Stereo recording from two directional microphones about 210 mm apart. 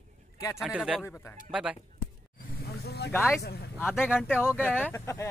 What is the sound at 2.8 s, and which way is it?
Speech, 50° left (ahead or behind).